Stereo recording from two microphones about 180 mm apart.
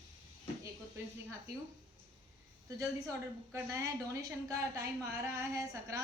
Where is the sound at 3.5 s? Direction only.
15° right (ahead or behind).